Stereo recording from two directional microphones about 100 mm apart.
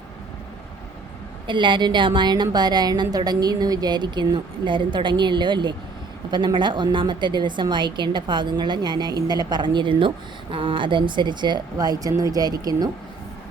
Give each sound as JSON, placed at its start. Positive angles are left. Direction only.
{"t": 1.5, "sound": "a woman's voice", "side_deg": -55}